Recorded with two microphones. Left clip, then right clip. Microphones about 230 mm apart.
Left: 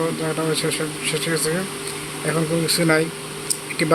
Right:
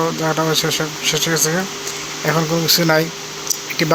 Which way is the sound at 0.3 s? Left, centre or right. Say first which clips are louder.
Right 5 dB; centre.